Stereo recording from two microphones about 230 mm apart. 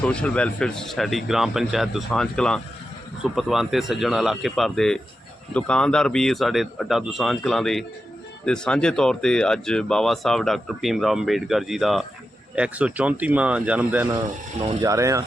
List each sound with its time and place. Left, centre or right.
0.0 s speech: centre
14.6 s speech: centre